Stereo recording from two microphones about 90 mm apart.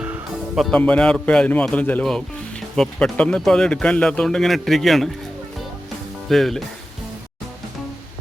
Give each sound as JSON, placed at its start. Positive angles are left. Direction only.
{"t": 0.7, "sound": "speech", "side_deg": 15}
{"t": 6.2, "sound": "speech", "side_deg": 5}